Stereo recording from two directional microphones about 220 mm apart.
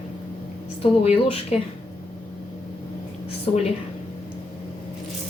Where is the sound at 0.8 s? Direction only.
25° left (ahead or behind).